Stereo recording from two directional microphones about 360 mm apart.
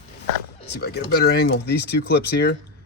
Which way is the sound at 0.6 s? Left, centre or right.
Left.